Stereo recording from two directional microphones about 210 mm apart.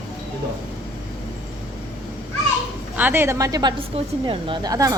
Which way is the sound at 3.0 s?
10° right (ahead or behind).